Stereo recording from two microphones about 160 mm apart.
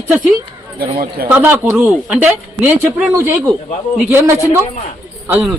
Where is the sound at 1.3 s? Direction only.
10° right (ahead or behind).